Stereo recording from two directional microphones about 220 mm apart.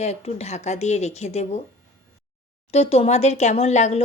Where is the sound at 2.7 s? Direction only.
30° left (ahead or behind).